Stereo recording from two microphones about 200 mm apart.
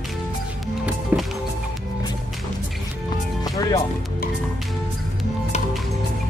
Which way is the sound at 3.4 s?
20° left (ahead or behind).